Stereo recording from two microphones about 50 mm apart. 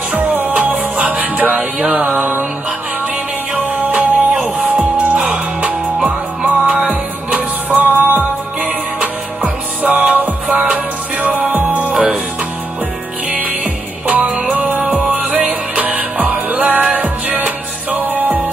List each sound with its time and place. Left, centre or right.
0.1 s music: right
1.8 s mantra: right
3.5 s music: right
7.3 s music: right
11.9 s music: centre
14.0 s music: right
14.4 s music: centre
15.0 s music: right